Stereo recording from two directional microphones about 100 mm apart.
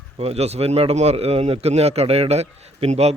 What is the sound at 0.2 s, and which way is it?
A man's voice, 90° right.